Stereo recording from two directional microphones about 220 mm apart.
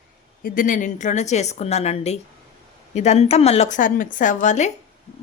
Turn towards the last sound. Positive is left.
turn(degrees=35)  # may be behind; listen again after turning